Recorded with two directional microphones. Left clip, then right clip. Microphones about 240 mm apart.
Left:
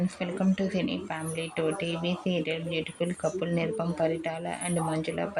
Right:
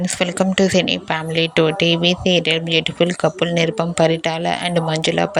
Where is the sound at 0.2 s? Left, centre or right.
Right.